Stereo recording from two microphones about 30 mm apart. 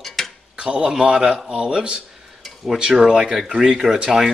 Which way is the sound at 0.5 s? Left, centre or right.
Right.